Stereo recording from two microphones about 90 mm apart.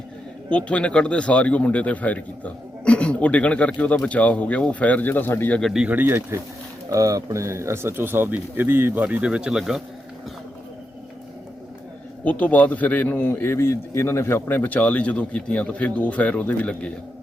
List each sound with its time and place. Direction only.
0.5 s a man's voice: 15° left (ahead or behind)
5.7 s speech: 15° right (ahead or behind)
6.9 s speech: 40° right (ahead or behind); by 9.8 s 5° right (ahead or behind)
12.2 s a man's voice: 15° left (ahead or behind)